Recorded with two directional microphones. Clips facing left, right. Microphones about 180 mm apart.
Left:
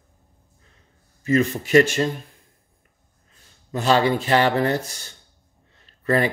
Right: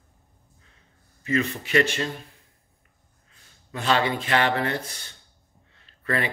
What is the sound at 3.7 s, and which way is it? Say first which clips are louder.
Speech: left 5 dB; 40° left (ahead or behind).